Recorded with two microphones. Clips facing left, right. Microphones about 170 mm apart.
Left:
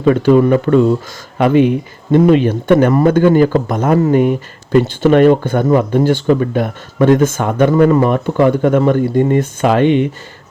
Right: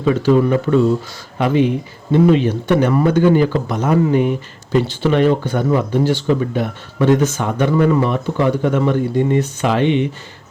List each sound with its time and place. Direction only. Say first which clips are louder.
0.0 s speech: left 4 dB; 55° left (ahead or behind)